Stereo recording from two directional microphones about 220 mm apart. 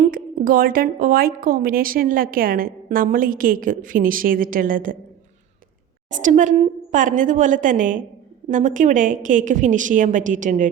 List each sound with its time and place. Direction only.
0.0 s speech: 40° right (ahead or behind)
6.2 s speech: 35° right (ahead or behind)